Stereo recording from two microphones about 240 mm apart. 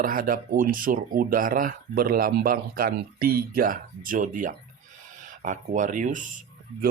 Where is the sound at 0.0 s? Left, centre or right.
Right.